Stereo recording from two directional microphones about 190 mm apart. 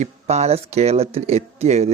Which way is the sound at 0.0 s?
35° right (ahead or behind).